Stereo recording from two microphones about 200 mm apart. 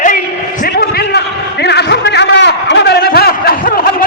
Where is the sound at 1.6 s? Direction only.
60° left (ahead or behind).